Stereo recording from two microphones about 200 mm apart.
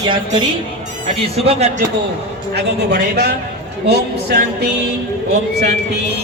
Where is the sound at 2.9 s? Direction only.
50° right (ahead or behind).